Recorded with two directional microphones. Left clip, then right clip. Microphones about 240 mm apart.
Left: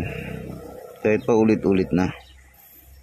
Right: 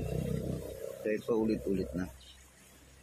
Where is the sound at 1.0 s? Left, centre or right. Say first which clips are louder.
Left 13 dB; left.